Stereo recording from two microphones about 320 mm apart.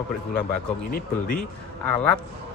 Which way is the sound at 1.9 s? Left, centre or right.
Centre.